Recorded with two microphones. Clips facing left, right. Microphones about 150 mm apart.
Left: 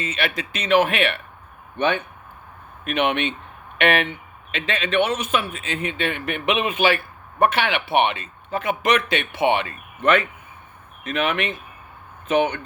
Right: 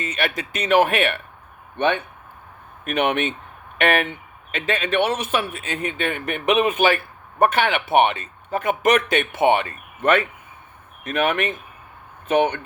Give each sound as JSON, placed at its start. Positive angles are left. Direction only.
{"t": 0.0, "sound": "a man's voice", "side_deg": -40}
{"t": 2.8, "sound": "a man's voice", "side_deg": -40}